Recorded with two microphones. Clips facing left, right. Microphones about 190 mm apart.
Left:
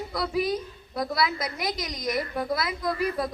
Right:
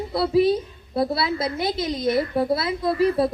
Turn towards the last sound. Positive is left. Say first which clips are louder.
# right 7 dB
turn(degrees=-30)  # may be behind; listen again after turning